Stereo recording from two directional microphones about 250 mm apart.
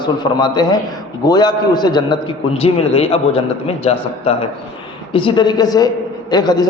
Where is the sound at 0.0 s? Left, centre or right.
Centre.